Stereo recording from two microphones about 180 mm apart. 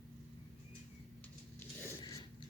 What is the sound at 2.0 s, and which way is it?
Mechanisms, 20° left (ahead or behind).